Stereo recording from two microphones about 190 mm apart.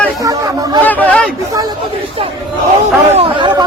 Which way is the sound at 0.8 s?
10° left (ahead or behind).